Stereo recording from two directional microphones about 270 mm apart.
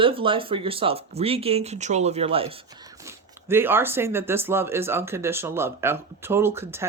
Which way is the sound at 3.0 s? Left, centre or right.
Centre.